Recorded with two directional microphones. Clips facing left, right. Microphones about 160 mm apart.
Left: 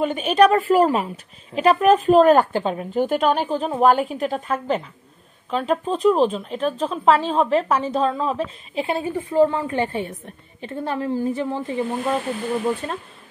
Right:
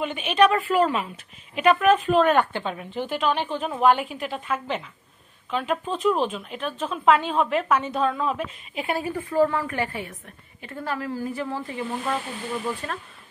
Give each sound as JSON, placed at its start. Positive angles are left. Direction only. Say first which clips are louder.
{"t": 0.0, "sound": "speech", "louder": "left 4 dB", "side_deg": 40}